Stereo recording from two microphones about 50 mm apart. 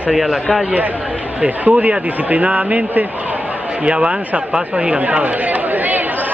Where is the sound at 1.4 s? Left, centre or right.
Right.